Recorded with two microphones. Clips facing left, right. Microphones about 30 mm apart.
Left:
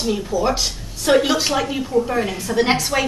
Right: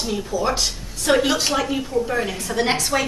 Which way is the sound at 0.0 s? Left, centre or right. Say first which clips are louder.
Left 3 dB; centre.